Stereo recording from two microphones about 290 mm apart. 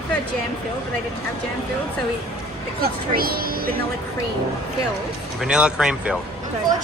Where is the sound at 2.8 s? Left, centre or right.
Right.